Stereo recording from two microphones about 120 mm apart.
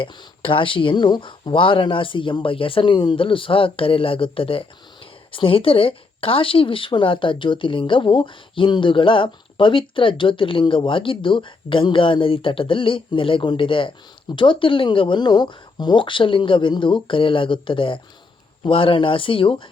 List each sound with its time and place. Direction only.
0.0 s a woman's voice: 45° left (ahead or behind)